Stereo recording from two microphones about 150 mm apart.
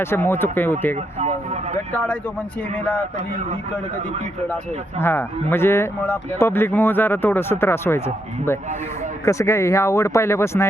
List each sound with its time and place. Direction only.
0.0 s speech: 15° left (ahead or behind)
4.4 s speech: 15° left (ahead or behind)